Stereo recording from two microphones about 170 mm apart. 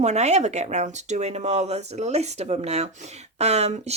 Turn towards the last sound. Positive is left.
turn(degrees=-40)  # may be behind; listen again after turning